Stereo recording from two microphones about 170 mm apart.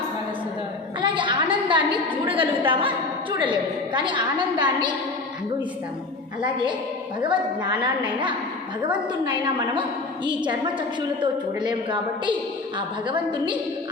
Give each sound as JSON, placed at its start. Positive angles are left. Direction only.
{"t": 1.0, "sound": "a woman's voice", "side_deg": -30}
{"t": 6.4, "sound": "a woman's voice", "side_deg": -25}